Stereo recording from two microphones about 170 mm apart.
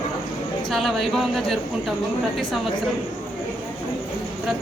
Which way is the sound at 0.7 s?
Centre (ahead or behind).